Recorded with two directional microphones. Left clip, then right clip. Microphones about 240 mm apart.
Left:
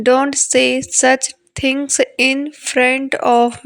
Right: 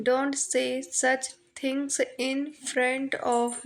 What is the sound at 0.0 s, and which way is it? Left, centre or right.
A woman's voice, left.